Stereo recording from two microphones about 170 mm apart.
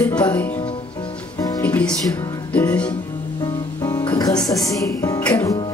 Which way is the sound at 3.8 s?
25° left (ahead or behind).